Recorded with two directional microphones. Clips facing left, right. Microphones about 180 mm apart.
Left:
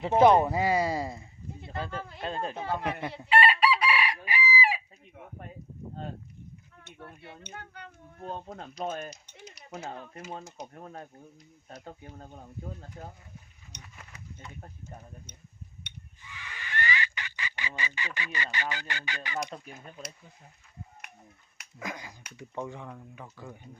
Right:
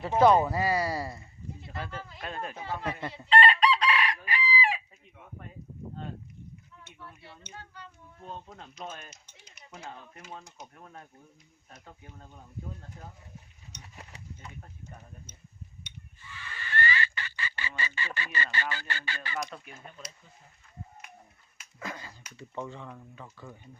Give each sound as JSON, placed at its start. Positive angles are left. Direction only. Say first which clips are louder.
{"t": 0.0, "sound": "speech", "louder": "left 1 dB", "side_deg": 20}
{"t": 1.6, "sound": "a sound", "louder": "left 4 dB", "side_deg": 25}
{"t": 2.1, "sound": "speech", "louder": "left 4 dB", "side_deg": 25}
{"t": 3.2, "sound": "chicken", "louder": "right 1 dB", "side_deg": 10}
{"t": 5.1, "sound": "a sound", "louder": "left 3 dB", "side_deg": 50}
{"t": 6.7, "sound": "speech", "louder": "left 6 dB", "side_deg": 55}
{"t": 13.9, "sound": "horse", "louder": "right 5 dB", "side_deg": -35}
{"t": 16.2, "sound": "speech", "louder": "right 1 dB", "side_deg": 15}
{"t": 21.8, "sound": "speech", "louder": "left 1 dB", "side_deg": 15}